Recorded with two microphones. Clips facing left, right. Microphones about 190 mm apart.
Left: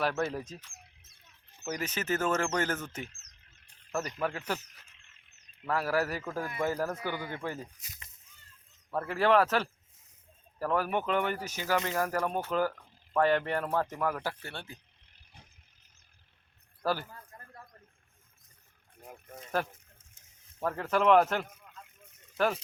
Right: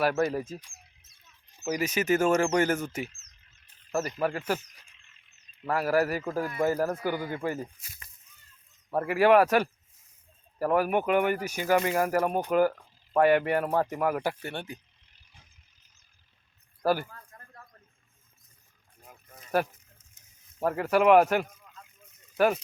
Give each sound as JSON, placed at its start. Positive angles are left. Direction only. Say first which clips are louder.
{"t": 0.0, "sound": "speech", "louder": "right 5 dB", "side_deg": -10}
{"t": 0.7, "sound": "a sound", "louder": "left 2 dB", "side_deg": 60}
{"t": 1.5, "sound": "speech", "louder": "right 6 dB", "side_deg": -10}
{"t": 3.1, "sound": "a sound", "louder": "left 1 dB", "side_deg": 60}
{"t": 4.4, "sound": "speech", "louder": "right 5 dB", "side_deg": -10}
{"t": 5.1, "sound": "frog", "louder": "even", "side_deg": 55}
{"t": 5.6, "sound": "speech", "louder": "right 4 dB", "side_deg": -10}
{"t": 7.8, "sound": "speech", "louder": "even", "side_deg": 20}
{"t": 8.9, "sound": "speech", "louder": "right 5 dB", "side_deg": -15}
{"t": 15.0, "sound": "vehicle", "louder": "left 3 dB", "side_deg": 60}
{"t": 16.8, "sound": "speech", "louder": "right 5 dB", "side_deg": -15}
{"t": 19.0, "sound": "a sound", "louder": "left 5 dB", "side_deg": 60}
{"t": 19.6, "sound": "speech", "louder": "right 5 dB", "side_deg": -10}